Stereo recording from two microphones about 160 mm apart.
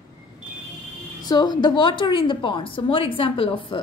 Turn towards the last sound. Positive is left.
turn(degrees=35)  # may be behind; listen again after turning